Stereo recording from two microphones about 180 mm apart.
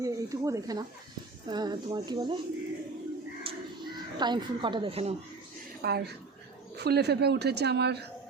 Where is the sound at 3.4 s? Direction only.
25° right (ahead or behind).